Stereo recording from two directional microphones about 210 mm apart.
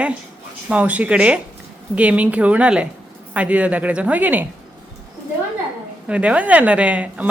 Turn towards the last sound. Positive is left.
turn(degrees=-5)  # may be behind; listen again after turning